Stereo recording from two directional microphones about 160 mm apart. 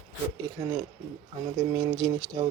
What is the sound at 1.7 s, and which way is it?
Speech, 25° right (ahead or behind).